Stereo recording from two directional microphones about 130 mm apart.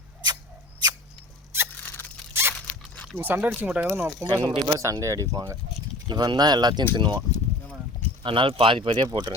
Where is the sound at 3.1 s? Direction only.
15° right (ahead or behind).